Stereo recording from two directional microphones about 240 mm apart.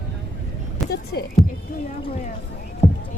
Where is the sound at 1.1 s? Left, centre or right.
Left.